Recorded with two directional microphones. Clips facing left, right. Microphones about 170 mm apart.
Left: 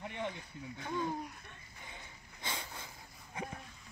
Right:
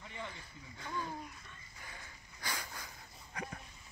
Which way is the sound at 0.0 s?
65° left (ahead or behind).